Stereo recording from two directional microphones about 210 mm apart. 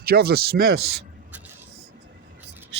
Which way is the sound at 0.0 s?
50° right (ahead or behind).